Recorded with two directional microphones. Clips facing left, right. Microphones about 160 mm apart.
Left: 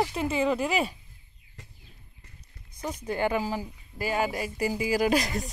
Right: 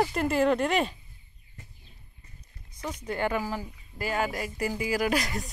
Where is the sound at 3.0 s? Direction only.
15° left (ahead or behind).